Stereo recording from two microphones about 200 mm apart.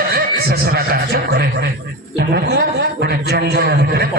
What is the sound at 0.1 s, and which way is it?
A man's voice, 50° right (ahead or behind).